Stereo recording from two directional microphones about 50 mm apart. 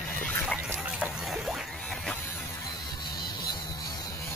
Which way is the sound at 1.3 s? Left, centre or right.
Centre.